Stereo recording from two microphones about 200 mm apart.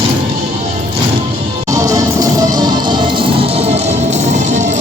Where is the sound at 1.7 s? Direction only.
15° right (ahead or behind); by 4.8 s 35° right (ahead or behind).